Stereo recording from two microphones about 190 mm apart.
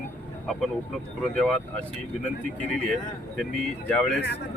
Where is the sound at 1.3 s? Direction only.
5° left (ahead or behind).